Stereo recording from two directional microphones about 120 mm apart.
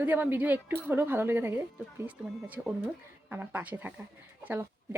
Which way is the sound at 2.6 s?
5° right (ahead or behind).